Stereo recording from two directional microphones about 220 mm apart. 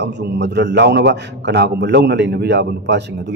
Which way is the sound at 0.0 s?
50° right (ahead or behind).